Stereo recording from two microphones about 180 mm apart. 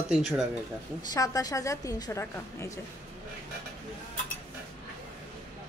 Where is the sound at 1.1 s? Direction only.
20° left (ahead or behind).